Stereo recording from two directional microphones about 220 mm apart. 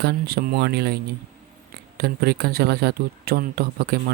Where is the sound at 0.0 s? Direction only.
45° right (ahead or behind).